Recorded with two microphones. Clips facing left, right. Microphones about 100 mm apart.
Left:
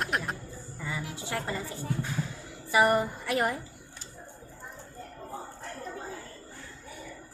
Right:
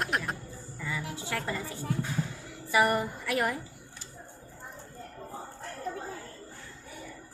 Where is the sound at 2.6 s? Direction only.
25° left (ahead or behind).